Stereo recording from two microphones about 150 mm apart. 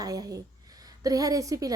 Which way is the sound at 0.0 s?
25° right (ahead or behind).